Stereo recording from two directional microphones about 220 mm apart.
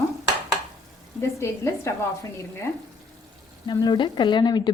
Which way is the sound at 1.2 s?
10° left (ahead or behind).